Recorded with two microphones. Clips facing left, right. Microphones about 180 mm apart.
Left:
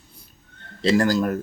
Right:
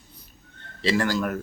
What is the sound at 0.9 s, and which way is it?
Speech, 40° left (ahead or behind).